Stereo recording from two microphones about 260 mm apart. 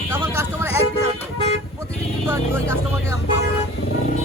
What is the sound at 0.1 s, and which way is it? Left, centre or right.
Vehicle, centre.